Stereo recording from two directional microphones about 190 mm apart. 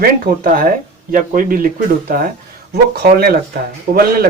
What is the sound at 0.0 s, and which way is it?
A man's voice, 50° right (ahead or behind).